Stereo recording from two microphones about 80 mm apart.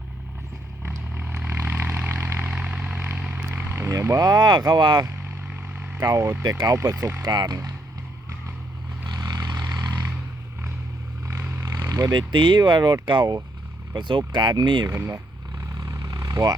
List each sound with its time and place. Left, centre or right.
0.8 s vehicle: right
2.5 s vehicle: centre
3.4 s a sound: right
4.3 s speech: right
6.4 s speech: right
9.1 s vehicle: right
11.9 s a sound: right
12.1 s speech: right
14.8 s speech: right
15.1 s vehicle: right